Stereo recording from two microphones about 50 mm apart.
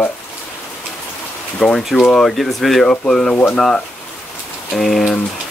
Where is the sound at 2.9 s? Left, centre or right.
Centre.